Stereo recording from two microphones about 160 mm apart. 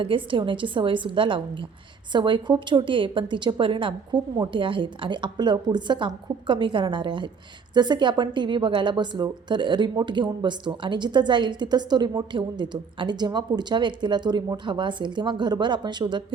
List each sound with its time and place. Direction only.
0.0 s a woman's voice: 30° right (ahead or behind)